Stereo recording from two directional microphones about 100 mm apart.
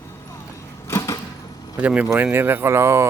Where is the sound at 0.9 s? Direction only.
30° left (ahead or behind).